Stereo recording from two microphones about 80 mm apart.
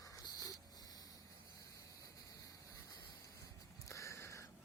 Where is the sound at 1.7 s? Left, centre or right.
Left.